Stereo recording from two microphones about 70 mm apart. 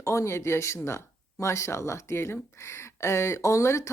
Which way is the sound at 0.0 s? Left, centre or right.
Left.